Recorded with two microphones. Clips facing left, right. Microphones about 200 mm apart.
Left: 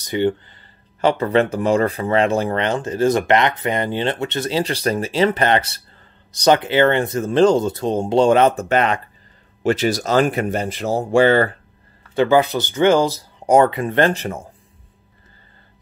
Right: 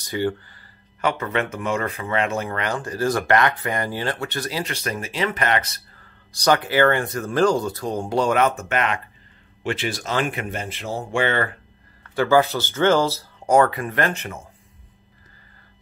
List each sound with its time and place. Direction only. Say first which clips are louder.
0.0 s speech: left 5 dB; 20° left (ahead or behind)
12.2 s speech: left 3 dB; 20° left (ahead or behind); by 14.5 s 35° left (ahead or behind)